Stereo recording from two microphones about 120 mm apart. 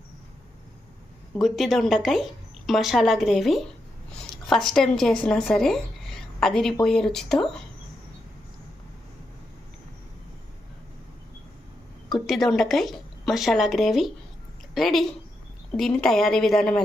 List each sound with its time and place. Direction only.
1.4 s a woman's voice: centre (ahead or behind)
12.2 s a woman's voice: centre (ahead or behind)